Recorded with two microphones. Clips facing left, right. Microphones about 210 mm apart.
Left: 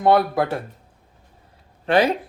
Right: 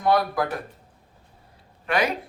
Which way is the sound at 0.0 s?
25° left (ahead or behind).